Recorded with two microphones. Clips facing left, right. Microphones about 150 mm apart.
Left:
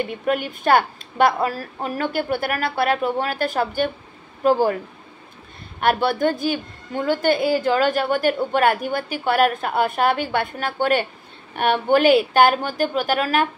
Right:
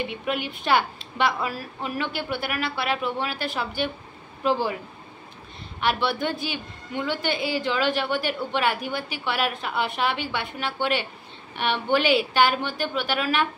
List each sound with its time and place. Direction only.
0.0 s a woman's voice: 45° left (ahead or behind)
5.8 s a woman's voice: 50° left (ahead or behind)